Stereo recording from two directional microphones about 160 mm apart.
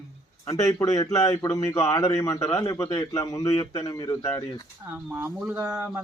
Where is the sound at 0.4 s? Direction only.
25° left (ahead or behind).